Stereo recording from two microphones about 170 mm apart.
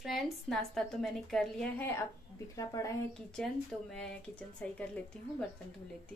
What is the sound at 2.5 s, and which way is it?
Speech, 20° left (ahead or behind).